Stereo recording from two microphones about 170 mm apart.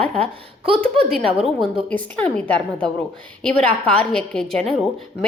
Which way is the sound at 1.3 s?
35° right (ahead or behind).